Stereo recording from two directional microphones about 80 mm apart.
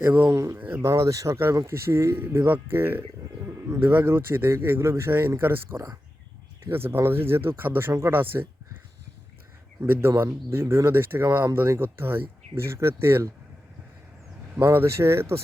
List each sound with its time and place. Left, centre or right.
0.0 s speech: right
0.3 s speech: right
3.4 s bird: right
3.8 s speech: right
9.8 s speech: right
14.6 s speech: right